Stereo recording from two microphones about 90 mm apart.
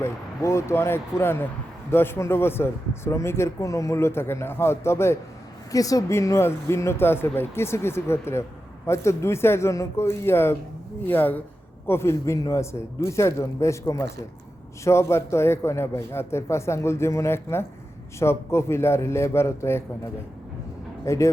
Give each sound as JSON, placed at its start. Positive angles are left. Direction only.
{"t": 0.0, "sound": "speech", "side_deg": 30}
{"t": 5.7, "sound": "speech", "side_deg": 40}
{"t": 21.0, "sound": "speech", "side_deg": 35}